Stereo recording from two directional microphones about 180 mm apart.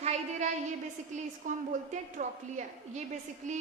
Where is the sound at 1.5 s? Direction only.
45° right (ahead or behind).